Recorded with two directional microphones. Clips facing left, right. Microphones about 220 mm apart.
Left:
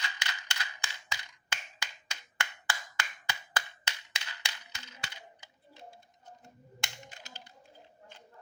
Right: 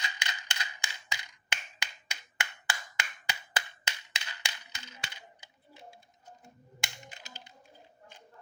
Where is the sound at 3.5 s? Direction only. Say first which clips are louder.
Right 1 dB; 15° right (ahead or behind).